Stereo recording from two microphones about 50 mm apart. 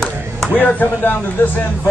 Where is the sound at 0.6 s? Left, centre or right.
Left.